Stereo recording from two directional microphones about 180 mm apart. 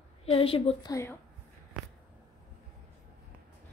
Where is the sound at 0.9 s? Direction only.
15° left (ahead or behind).